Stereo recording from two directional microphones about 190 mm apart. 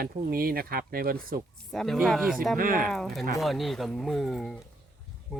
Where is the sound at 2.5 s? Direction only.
45° right (ahead or behind).